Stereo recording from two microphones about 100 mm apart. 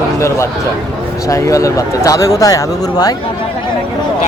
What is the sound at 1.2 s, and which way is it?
Speech, 30° left (ahead or behind).